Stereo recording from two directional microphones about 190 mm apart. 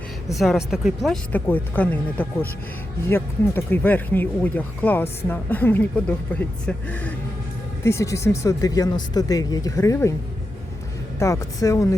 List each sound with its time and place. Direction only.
0.3 s speech: centre (ahead or behind); by 10.2 s 15° left (ahead or behind)
11.2 s speech: 15° left (ahead or behind)